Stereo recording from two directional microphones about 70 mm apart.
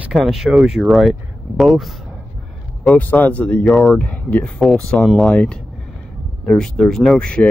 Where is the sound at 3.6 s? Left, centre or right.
Centre.